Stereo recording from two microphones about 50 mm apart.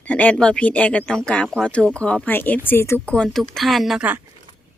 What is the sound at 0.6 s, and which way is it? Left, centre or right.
A woman's voice, left.